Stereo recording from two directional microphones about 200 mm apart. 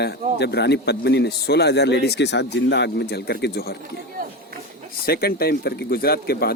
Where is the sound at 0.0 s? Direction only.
55° left (ahead or behind).